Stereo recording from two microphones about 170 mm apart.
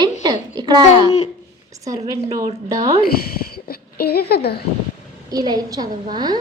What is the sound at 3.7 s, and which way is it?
Speech, 65° left (ahead or behind).